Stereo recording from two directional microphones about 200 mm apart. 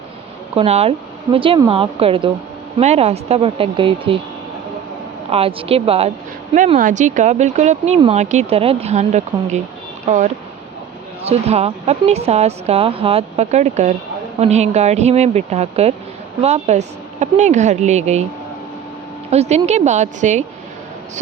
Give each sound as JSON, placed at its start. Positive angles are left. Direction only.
{"t": 0.5, "sound": "speech", "side_deg": -30}
{"t": 5.3, "sound": "a woman's voice", "side_deg": -30}
{"t": 19.3, "sound": "a woman's voice", "side_deg": -35}